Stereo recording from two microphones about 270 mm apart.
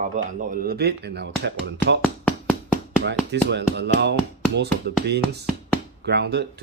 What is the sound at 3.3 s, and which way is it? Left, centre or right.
Speech, right.